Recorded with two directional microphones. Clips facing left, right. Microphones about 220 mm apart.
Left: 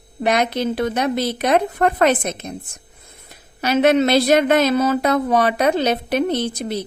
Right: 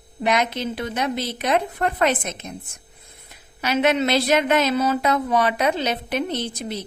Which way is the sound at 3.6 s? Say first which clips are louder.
Left 5 dB; 40° left (ahead or behind).